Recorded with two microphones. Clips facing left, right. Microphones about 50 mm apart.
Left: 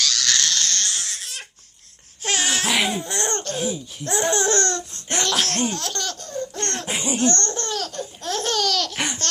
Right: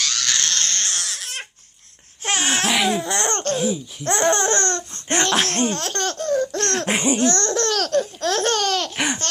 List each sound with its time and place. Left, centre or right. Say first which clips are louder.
0.0 s a sound: left 1 dB; right
0.9 s crying: right 2 dB; right
2.2 s baby cry: right 1 dB; right
2.6 s baby cry: right 2 dB; centre
2.9 s baby cry: right 4 dB; right
4.0 s speech: right 3 dB; right
4.7 s laughter: right 3 dB; right
6.3 s laughter: right 7 dB; right
7.3 s laughter: right 6 dB; right
9.0 s laughter: right 3 dB; centre